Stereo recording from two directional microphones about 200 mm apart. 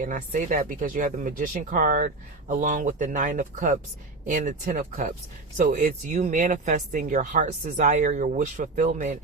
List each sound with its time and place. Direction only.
0.0 s speech: 40° right (ahead or behind)